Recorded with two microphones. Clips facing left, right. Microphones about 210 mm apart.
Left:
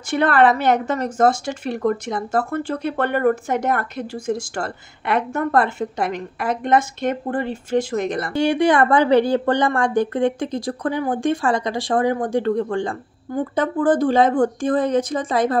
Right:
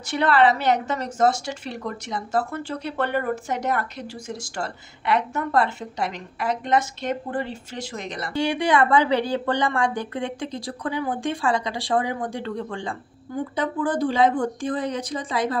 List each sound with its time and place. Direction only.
0.1 s a woman's voice: 50° left (ahead or behind)